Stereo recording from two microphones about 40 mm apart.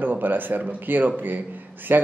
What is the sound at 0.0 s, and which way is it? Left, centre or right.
Speech, right.